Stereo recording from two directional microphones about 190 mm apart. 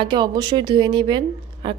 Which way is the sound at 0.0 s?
25° right (ahead or behind).